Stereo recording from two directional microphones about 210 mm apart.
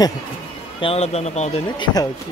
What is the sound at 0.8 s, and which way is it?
Speech, 30° left (ahead or behind).